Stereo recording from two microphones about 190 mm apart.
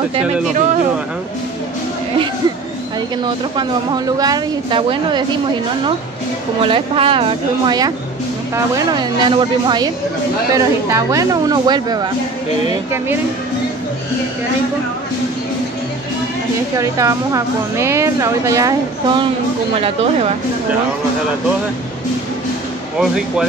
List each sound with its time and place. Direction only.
0.1 s speech: 40° right (ahead or behind)
3.5 s a woman's voice: 20° right (ahead or behind)
6.6 s a woman's voice: 30° right (ahead or behind)
16.7 s a woman's voice: 15° right (ahead or behind)
19.8 s speech: 30° right (ahead or behind)
22.9 s speech: 5° right (ahead or behind)